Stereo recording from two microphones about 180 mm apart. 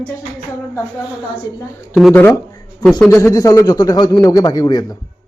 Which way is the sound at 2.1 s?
10° left (ahead or behind).